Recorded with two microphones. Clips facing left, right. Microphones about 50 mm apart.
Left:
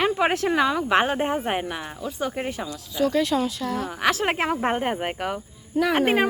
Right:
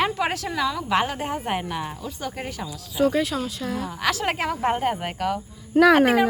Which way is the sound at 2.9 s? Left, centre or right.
Centre.